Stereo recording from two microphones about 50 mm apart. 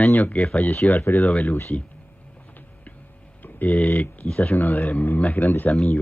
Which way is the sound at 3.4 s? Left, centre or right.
Left.